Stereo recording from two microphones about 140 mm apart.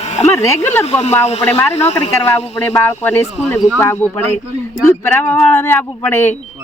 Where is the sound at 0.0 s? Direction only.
50° left (ahead or behind).